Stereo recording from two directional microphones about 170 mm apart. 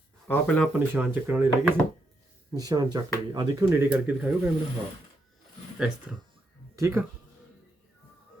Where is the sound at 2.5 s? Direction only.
20° right (ahead or behind).